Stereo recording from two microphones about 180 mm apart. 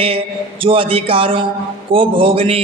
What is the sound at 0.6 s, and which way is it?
A man's voice, 30° right (ahead or behind).